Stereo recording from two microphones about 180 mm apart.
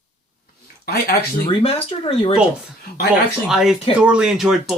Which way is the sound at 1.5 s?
30° left (ahead or behind).